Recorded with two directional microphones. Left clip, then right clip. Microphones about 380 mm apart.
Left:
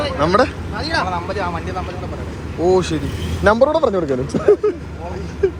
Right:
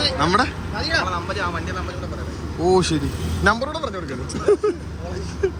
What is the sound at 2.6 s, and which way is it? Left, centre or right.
Speech, centre.